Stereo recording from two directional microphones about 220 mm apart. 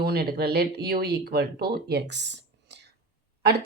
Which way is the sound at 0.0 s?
45° right (ahead or behind).